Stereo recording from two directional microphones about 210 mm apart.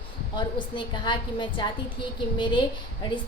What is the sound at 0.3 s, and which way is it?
A woman's voice, 20° left (ahead or behind).